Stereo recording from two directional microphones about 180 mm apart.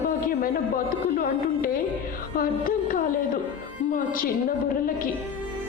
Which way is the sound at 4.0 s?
50° left (ahead or behind).